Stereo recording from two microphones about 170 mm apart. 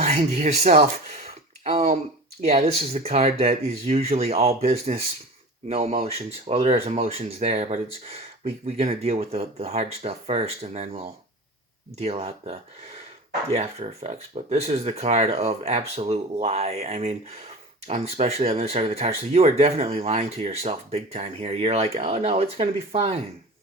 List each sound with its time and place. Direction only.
0.0 s speech: 40° right (ahead or behind)
1.6 s a sound: 40° right (ahead or behind)
2.4 s speech: 40° right (ahead or behind)